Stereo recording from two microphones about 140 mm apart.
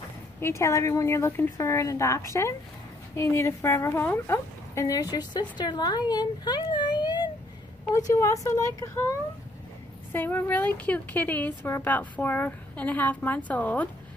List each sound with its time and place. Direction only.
0.4 s speech: 20° left (ahead or behind)
10.1 s a woman's voice: 15° left (ahead or behind)